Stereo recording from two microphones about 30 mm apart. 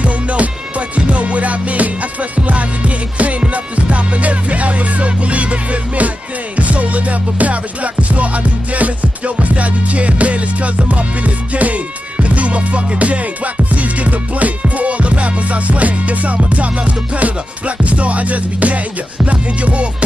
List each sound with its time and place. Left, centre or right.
0.0 s music: right